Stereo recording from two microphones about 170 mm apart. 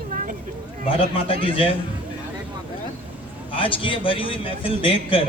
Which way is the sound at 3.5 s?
30° left (ahead or behind).